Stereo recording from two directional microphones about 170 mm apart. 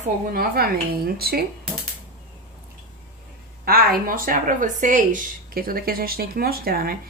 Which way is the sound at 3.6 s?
60° right (ahead or behind).